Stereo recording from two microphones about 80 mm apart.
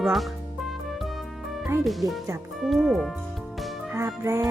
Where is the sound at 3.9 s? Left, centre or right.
Right.